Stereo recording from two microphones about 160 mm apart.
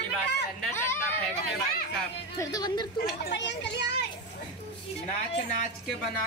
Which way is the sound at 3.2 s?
90° left.